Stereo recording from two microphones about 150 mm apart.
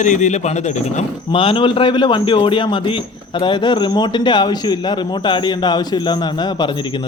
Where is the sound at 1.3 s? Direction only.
35° left (ahead or behind).